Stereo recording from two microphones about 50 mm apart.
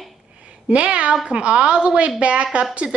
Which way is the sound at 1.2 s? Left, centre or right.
Right.